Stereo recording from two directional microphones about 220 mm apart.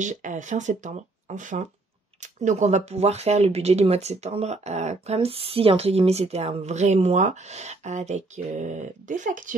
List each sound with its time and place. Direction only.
0.0 s speech: 35° right (ahead or behind)